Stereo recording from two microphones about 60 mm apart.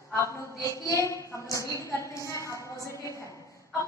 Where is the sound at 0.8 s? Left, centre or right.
Left.